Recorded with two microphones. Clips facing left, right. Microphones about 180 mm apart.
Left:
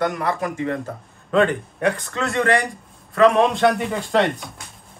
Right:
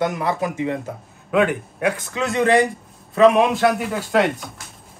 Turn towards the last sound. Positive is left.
turn(degrees=-5)  # may be behind; listen again after turning